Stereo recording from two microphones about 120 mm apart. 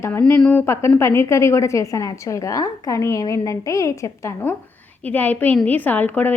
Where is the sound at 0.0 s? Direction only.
15° left (ahead or behind).